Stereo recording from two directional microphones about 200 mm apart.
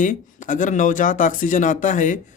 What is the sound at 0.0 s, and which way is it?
Speech, 40° left (ahead or behind).